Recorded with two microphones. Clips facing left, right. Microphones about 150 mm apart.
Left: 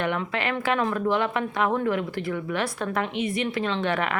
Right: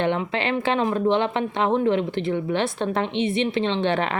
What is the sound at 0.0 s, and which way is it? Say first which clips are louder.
Speech: right 3 dB; 25° right (ahead or behind).